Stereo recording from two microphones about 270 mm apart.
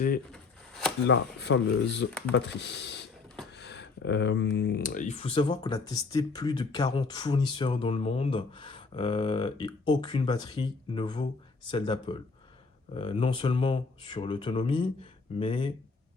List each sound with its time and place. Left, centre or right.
0.3 s shuffling cards: centre
1.0 s speech: left; by 15.7 s centre